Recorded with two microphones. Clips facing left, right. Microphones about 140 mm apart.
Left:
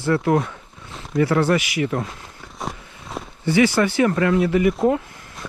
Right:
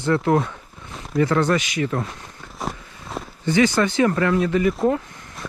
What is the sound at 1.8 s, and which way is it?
Speech, 25° left (ahead or behind).